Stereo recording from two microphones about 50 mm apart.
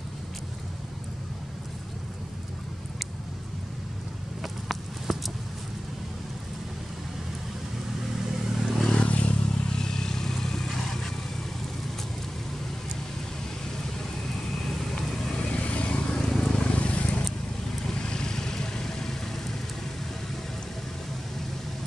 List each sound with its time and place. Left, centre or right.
4.4 s a sound: centre
8.6 s vehicle: centre
8.9 s vehicle: left
9.8 s vehicle: centre
15.0 s vehicle: centre
17.8 s vehicle: centre